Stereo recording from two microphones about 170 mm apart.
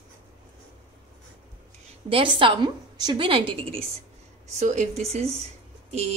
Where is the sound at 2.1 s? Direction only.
30° right (ahead or behind).